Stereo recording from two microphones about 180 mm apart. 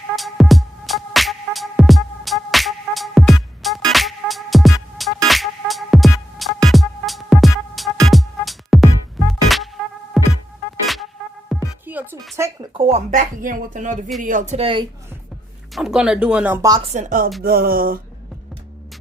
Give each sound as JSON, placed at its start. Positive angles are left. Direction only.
{"t": 0.2, "sound": "music", "side_deg": 0}
{"t": 12.7, "sound": "speech", "side_deg": -40}
{"t": 15.7, "sound": "speech", "side_deg": -5}
{"t": 16.9, "sound": "speech", "side_deg": -45}
{"t": 17.4, "sound": "a sound", "side_deg": -55}